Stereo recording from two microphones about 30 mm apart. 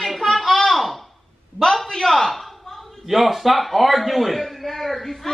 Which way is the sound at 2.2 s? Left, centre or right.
Centre.